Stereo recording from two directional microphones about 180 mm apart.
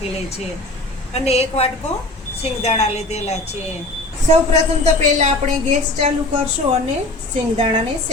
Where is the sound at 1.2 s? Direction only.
35° left (ahead or behind).